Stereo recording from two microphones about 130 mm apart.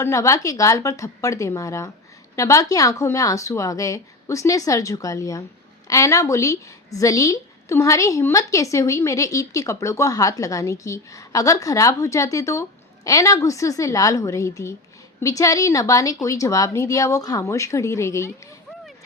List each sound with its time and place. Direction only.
0.0 s a woman's voice: 25° left (ahead or behind)